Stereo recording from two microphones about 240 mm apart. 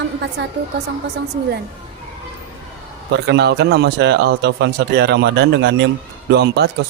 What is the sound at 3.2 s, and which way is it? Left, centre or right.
Speech, right.